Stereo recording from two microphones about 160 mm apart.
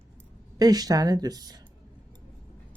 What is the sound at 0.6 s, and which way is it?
Speech, 25° right (ahead or behind).